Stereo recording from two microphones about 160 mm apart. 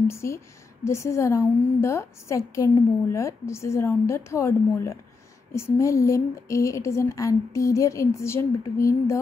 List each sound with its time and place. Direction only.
0.1 s a woman's voice: 15° left (ahead or behind)